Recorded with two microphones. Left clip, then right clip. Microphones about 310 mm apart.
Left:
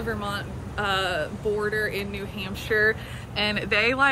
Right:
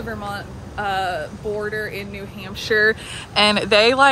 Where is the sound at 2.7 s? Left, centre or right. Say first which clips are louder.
Right 5 dB; right; by 4.1 s centre.